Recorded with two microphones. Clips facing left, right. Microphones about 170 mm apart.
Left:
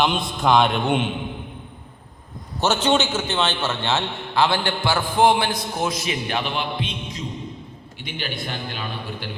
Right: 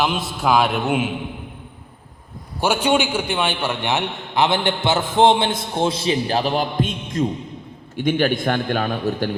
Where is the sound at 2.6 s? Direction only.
10° right (ahead or behind).